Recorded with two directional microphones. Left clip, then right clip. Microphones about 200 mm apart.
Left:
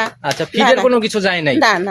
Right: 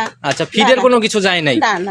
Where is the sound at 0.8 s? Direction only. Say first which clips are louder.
Right 2 dB; 25° right (ahead or behind).